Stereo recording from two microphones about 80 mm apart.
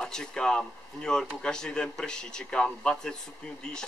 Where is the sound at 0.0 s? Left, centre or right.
Centre.